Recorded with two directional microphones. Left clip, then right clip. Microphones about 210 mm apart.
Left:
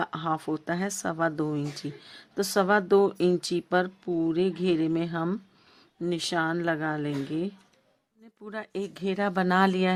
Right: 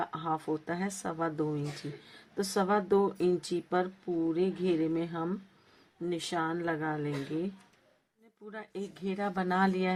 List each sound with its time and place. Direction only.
0.0 s speech: 40° left (ahead or behind)